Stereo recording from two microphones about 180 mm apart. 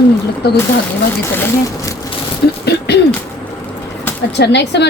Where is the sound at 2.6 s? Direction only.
70° left (ahead or behind).